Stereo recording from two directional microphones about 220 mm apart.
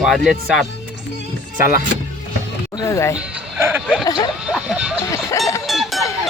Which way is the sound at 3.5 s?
10° right (ahead or behind).